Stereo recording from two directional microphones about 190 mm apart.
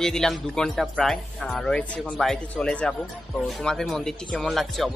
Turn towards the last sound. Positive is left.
turn(degrees=0)  # may be behind; listen again after turning